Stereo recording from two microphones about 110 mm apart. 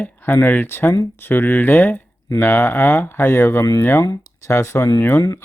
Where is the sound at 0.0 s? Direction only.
15° left (ahead or behind).